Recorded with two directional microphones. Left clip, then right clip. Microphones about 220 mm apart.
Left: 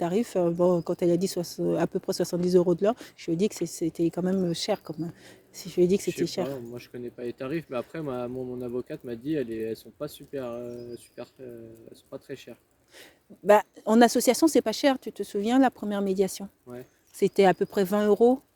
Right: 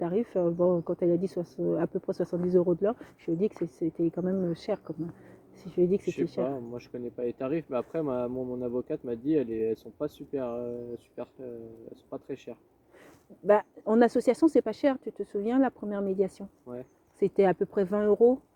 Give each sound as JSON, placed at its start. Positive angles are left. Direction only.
{"t": 0.0, "sound": "speech", "side_deg": 45}